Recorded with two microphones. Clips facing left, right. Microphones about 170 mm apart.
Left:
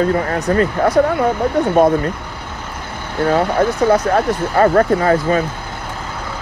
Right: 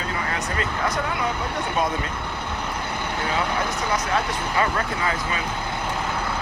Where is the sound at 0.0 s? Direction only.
50° left (ahead or behind).